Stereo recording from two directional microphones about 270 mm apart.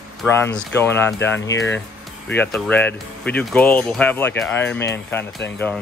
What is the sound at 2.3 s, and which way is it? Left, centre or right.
Speech, centre.